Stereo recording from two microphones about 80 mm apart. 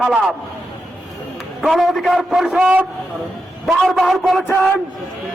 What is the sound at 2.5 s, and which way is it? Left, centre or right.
Speech, centre.